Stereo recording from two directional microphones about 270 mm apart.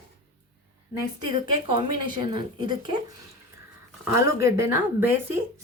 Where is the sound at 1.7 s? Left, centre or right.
Centre.